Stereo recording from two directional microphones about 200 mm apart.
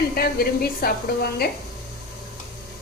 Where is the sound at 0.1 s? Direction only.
50° left (ahead or behind).